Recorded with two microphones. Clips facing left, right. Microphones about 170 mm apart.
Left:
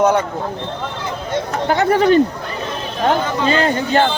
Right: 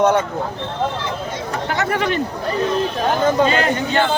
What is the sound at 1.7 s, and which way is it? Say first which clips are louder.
Speech: left 8 dB; 35° left (ahead or behind).